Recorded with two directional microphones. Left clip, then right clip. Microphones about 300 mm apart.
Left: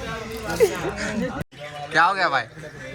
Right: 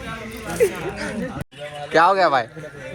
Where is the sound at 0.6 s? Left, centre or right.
Left.